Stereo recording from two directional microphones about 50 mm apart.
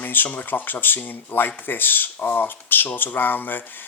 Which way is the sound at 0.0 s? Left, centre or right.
Left.